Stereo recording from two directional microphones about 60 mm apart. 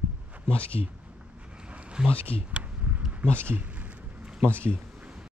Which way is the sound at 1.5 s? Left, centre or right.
Centre.